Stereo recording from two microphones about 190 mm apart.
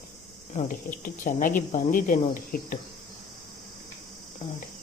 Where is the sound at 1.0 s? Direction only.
45° left (ahead or behind).